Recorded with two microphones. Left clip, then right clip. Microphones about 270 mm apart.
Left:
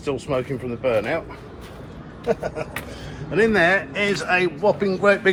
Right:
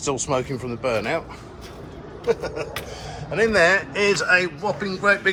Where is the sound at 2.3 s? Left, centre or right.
Centre.